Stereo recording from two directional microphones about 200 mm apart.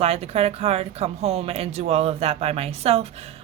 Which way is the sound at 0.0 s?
30° right (ahead or behind).